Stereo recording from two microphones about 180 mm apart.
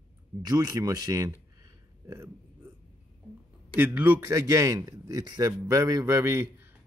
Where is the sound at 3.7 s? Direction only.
10° right (ahead or behind).